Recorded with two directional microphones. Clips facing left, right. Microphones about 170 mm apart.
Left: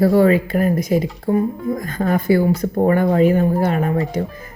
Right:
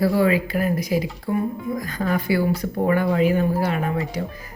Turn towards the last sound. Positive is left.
turn(degrees=50)  # may be behind; listen again after turning